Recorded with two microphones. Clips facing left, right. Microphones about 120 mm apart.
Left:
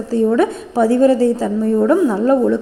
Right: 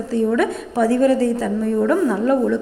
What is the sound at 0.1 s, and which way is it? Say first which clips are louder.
A woman's voice: left 4 dB; 35° left (ahead or behind).